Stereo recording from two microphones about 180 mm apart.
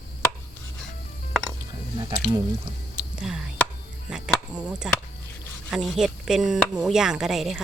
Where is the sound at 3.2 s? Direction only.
5° right (ahead or behind).